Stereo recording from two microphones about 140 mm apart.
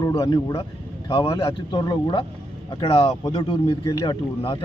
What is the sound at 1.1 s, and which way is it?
A man's voice, 40° left (ahead or behind).